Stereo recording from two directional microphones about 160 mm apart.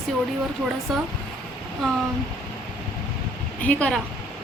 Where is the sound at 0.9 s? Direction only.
Centre (ahead or behind).